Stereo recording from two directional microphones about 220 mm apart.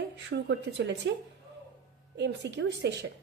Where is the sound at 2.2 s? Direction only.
50° right (ahead or behind).